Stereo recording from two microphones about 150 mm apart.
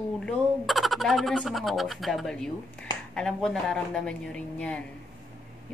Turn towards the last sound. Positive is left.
turn(degrees=5)  # may be behind; listen again after turning